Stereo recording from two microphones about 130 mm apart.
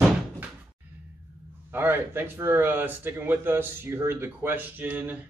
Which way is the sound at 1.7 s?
15° right (ahead or behind).